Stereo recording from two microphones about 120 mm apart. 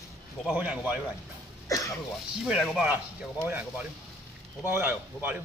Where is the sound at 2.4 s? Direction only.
5° right (ahead or behind).